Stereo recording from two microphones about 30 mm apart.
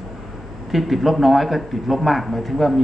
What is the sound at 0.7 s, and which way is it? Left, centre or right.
Speech, centre.